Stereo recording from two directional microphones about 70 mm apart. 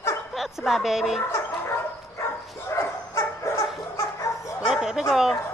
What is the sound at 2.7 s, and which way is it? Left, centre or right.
Dog, left.